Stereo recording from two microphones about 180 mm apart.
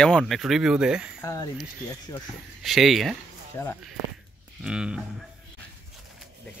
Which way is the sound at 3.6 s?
15° left (ahead or behind).